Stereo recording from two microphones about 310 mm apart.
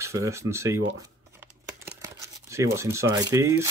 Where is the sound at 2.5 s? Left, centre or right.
Centre.